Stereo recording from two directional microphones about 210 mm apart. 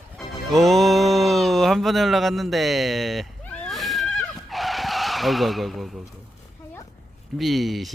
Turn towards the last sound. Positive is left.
turn(degrees=0)  # may be behind; listen again after turning